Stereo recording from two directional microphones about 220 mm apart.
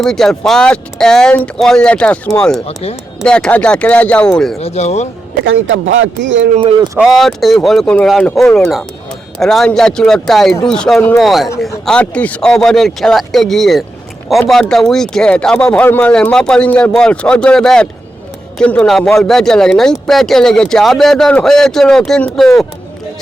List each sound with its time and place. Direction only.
0.0 s speech: centre (ahead or behind)
4.6 s speech: 30° left (ahead or behind)
5.5 s speech: 60° right (ahead or behind)
7.0 s speech: centre (ahead or behind)